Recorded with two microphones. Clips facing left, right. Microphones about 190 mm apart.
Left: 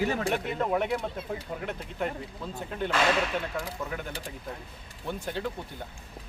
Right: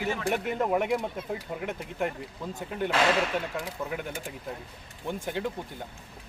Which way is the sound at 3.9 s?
10° right (ahead or behind).